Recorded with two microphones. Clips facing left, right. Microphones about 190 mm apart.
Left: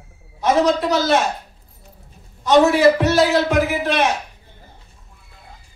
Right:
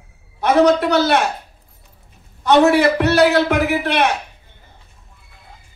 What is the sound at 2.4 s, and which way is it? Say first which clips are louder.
A man's voice: even; 60° right (ahead or behind).